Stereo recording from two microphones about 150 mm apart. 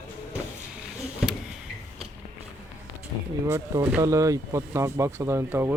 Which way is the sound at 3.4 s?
20° right (ahead or behind).